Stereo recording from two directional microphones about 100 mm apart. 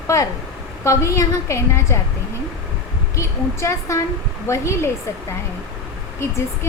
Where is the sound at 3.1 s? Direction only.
30° left (ahead or behind).